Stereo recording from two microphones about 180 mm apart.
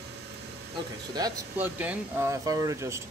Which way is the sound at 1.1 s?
20° right (ahead or behind).